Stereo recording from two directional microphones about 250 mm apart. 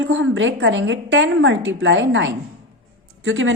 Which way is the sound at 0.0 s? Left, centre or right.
Right.